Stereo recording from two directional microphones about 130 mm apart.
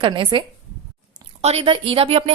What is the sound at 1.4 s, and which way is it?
Speech, 45° right (ahead or behind).